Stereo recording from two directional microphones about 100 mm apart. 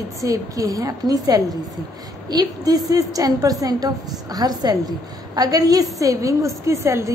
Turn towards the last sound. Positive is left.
turn(degrees=-30)  # may be behind; listen again after turning